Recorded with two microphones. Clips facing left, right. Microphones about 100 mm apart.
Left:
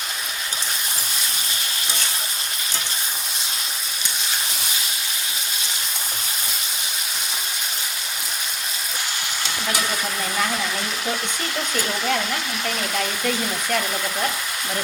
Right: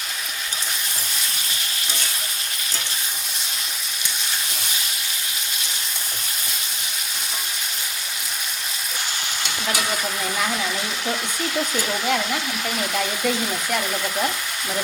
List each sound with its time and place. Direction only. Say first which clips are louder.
11.7 s speech: even; 5° right (ahead or behind)